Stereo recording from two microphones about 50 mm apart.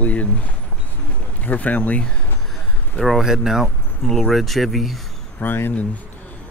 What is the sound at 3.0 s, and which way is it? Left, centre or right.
Speech, centre.